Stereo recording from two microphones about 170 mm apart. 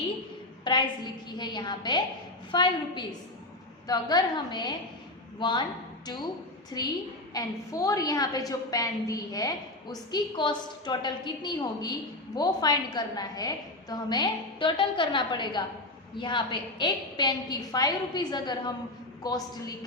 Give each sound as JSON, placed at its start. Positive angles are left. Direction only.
{"t": 0.6, "sound": "a woman's voice", "side_deg": 25}
{"t": 6.7, "sound": "a woman's voice", "side_deg": 25}